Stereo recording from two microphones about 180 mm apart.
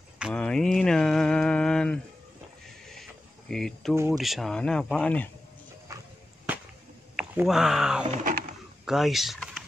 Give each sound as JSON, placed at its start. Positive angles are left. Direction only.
{"t": 0.3, "sound": "mantra", "side_deg": 5}
{"t": 2.9, "sound": "cricket", "side_deg": 0}
{"t": 3.9, "sound": "speech", "side_deg": -15}
{"t": 4.2, "sound": "a man's voice", "side_deg": 0}
{"t": 5.9, "sound": "walk", "side_deg": -15}
{"t": 7.2, "sound": "speech", "side_deg": -5}
{"t": 8.2, "sound": "a sound", "side_deg": -50}
{"t": 8.8, "sound": "speech", "side_deg": 0}